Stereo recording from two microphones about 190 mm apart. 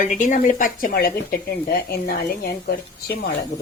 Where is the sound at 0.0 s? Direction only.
45° left (ahead or behind).